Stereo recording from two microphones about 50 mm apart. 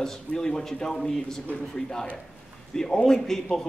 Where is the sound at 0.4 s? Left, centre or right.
Centre.